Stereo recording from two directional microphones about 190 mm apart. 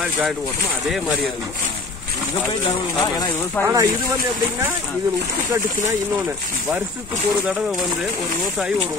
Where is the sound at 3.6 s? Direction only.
15° right (ahead or behind).